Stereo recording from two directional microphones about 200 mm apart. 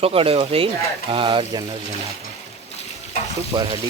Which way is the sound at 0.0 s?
30° right (ahead or behind).